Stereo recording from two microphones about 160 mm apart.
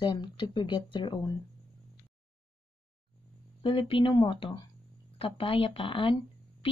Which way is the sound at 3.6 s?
30° left (ahead or behind).